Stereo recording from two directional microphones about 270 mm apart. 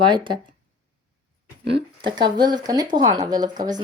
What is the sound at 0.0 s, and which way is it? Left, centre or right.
Speech, centre.